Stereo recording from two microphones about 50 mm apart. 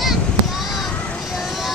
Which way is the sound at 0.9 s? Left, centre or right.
Left.